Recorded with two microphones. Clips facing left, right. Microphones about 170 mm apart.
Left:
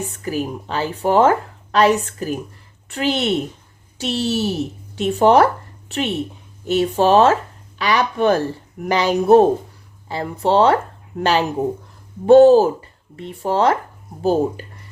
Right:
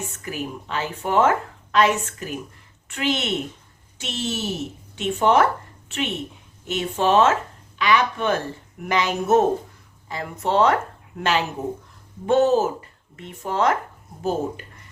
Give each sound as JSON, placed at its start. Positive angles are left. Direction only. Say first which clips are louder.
{"t": 0.0, "sound": "a woman's voice", "louder": "left 7 dB", "side_deg": 35}